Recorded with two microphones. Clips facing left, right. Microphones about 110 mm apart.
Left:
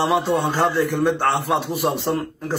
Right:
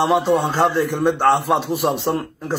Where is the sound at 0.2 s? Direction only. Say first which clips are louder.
Right 3 dB; 15° right (ahead or behind).